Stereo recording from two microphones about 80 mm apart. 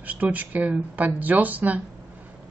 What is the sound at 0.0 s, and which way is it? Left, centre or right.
Speech, right.